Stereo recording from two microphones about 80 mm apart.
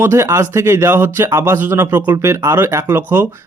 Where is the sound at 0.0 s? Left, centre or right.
Right.